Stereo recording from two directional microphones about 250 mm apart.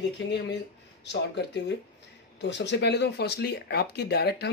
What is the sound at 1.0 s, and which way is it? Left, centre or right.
Speech, left.